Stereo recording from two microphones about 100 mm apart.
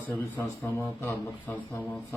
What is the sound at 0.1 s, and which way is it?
Speech, 20° left (ahead or behind).